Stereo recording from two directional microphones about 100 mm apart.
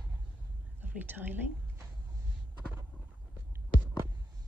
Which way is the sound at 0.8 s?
20° right (ahead or behind).